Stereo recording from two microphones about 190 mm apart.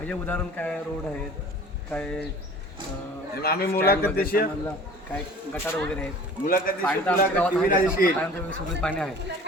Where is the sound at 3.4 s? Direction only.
55° left (ahead or behind).